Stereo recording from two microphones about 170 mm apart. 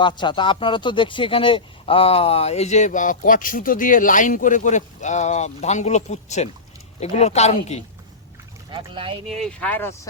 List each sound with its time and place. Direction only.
0.0 s speech: 25° left (ahead or behind)
8.7 s speech: 30° right (ahead or behind)
9.2 s speech: 5° left (ahead or behind)